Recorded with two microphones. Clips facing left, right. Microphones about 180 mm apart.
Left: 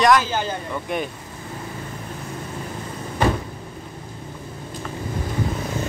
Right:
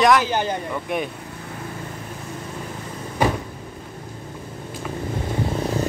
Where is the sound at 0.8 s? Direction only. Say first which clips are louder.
Left 1 dB; centre (ahead or behind).